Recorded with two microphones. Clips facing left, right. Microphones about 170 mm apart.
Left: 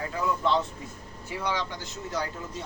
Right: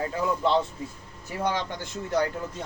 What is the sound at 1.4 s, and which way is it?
Speech, 50° right (ahead or behind).